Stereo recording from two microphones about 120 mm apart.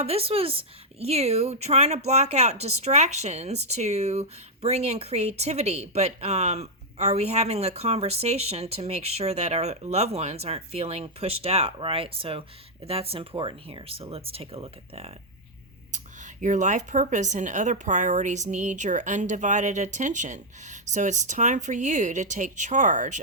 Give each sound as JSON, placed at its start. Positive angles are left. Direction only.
{"t": 0.0, "sound": "speech", "side_deg": -55}
{"t": 15.9, "sound": "speech", "side_deg": -90}